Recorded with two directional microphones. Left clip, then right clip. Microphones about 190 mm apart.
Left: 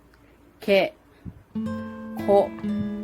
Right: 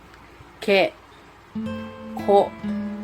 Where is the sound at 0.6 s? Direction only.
20° left (ahead or behind).